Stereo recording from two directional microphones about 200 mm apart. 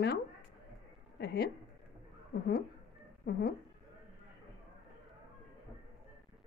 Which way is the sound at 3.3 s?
50° left (ahead or behind).